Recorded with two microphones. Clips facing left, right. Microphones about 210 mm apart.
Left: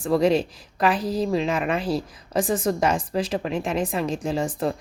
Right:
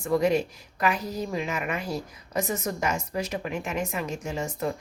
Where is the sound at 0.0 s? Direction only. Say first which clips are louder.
Left 3 dB; 30° left (ahead or behind).